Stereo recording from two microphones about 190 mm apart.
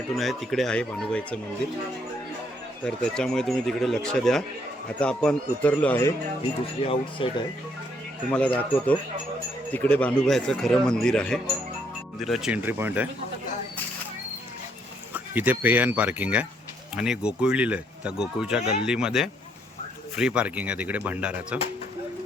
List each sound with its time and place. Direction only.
0.2 s speech: centre (ahead or behind)
2.8 s speech: 5° left (ahead or behind)
6.8 s speech: 30° left (ahead or behind)
8.3 s speech: 5° left (ahead or behind); by 13.1 s 10° right (ahead or behind)
15.1 s speech: 10° right (ahead or behind)